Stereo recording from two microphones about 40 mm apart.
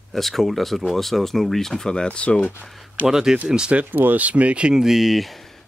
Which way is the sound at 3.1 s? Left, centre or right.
Centre.